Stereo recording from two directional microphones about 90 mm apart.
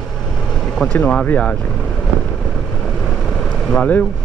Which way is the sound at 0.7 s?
10° left (ahead or behind).